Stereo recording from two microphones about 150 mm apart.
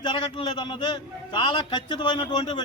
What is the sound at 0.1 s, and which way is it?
A man's voice, 35° left (ahead or behind).